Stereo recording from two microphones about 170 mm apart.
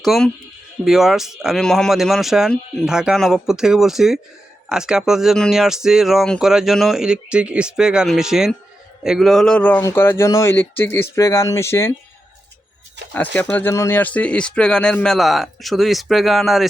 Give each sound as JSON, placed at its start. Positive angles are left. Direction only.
{"t": 0.0, "sound": "speech", "side_deg": 0}
{"t": 13.1, "sound": "speech", "side_deg": 10}